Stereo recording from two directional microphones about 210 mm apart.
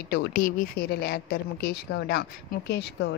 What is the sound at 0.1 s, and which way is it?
A woman's voice, 45° left (ahead or behind).